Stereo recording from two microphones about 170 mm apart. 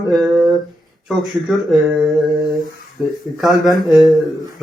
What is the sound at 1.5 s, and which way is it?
Speech, centre (ahead or behind).